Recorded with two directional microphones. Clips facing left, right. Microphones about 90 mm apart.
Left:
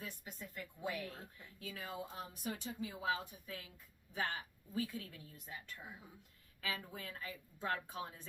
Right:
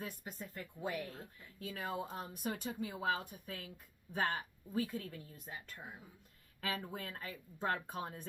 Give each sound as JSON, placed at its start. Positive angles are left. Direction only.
{"t": 0.0, "sound": "speech", "side_deg": -40}
{"t": 1.5, "sound": "speech", "side_deg": -50}